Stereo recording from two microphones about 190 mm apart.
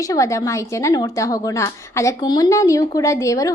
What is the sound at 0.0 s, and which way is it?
Speech, 15° left (ahead or behind).